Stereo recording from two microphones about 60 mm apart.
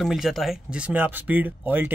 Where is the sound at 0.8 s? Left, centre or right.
Right.